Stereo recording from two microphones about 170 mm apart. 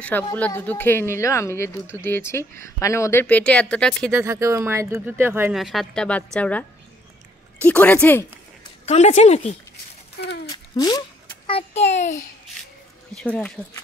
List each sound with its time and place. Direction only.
0.1 s speech: 10° left (ahead or behind)
4.1 s speech: 15° right (ahead or behind)
5.5 s a woman's voice: centre (ahead or behind)
7.6 s speech: 10° left (ahead or behind)
8.8 s a child's voice: 40° left (ahead or behind)
10.1 s a child's voice: 75° left (ahead or behind)
10.5 s speech: 25° left (ahead or behind)
11.4 s a child's voice: 35° left (ahead or behind)
13.1 s speech: 5° left (ahead or behind)